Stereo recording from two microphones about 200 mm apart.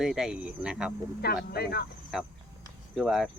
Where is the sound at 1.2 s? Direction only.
55° left (ahead or behind).